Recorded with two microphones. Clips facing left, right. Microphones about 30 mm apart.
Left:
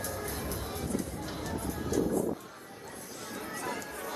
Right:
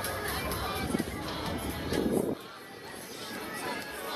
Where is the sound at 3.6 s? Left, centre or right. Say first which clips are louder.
Even; right.